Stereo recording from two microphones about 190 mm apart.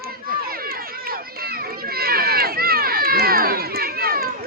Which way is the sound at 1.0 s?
55° right (ahead or behind).